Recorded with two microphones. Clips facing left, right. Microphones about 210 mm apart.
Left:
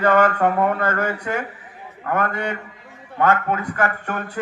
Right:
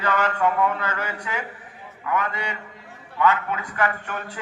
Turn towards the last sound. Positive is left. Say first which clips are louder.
# left 4 dB
turn(degrees=50)  # may be behind; listen again after turning